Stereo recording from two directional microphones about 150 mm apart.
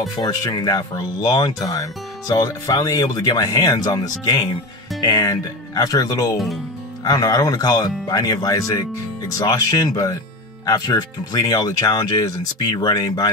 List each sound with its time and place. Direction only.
0.1 s speech: 25° left (ahead or behind)